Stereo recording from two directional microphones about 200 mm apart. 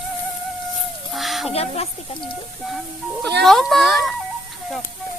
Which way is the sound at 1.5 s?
30° left (ahead or behind).